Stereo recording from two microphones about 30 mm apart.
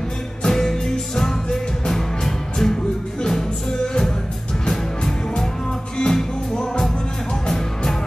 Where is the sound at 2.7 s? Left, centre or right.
Left.